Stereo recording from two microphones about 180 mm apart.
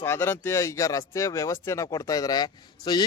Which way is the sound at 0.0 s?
15° left (ahead or behind).